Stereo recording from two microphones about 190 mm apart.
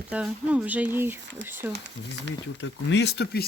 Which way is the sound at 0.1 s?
5° right (ahead or behind).